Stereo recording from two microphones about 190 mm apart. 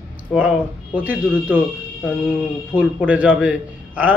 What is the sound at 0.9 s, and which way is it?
Speech, 10° right (ahead or behind).